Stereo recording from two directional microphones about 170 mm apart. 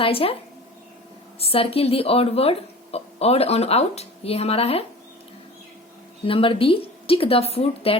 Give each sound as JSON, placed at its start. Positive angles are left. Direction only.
{"t": 0.0, "sound": "speech", "side_deg": 35}
{"t": 1.4, "sound": "speech", "side_deg": 35}
{"t": 6.2, "sound": "speech", "side_deg": 30}